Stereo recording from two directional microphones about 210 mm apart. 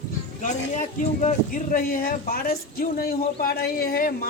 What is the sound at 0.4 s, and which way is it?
A man's voice, 35° left (ahead or behind).